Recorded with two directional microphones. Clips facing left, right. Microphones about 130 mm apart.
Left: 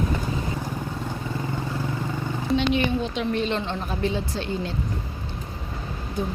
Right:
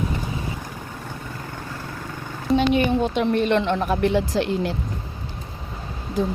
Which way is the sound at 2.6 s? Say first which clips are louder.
Right 5 dB; 50° right (ahead or behind).